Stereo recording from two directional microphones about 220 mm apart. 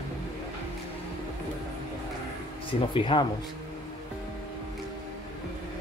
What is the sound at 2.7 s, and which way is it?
Speech, 20° left (ahead or behind).